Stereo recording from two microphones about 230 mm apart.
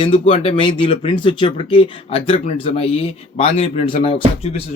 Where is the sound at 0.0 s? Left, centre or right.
Left.